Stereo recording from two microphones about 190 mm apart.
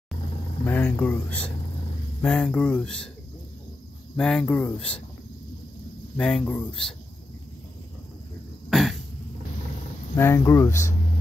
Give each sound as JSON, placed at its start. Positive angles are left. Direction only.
{"t": 0.7, "sound": "speech", "side_deg": 10}
{"t": 4.2, "sound": "speech", "side_deg": 5}
{"t": 6.1, "sound": "speech", "side_deg": 5}
{"t": 8.6, "sound": "throat clearing", "side_deg": 0}
{"t": 10.1, "sound": "speech", "side_deg": 10}